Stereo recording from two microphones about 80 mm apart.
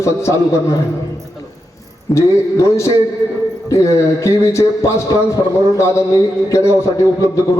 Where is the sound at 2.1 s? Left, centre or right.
Left.